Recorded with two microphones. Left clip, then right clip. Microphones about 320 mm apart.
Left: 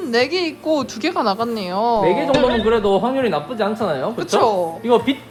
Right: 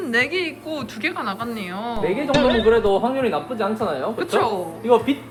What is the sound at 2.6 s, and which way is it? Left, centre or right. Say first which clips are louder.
Speech: left 1 dB; left.